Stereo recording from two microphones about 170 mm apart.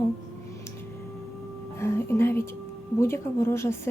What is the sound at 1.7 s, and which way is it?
A woman's voice, 15° left (ahead or behind).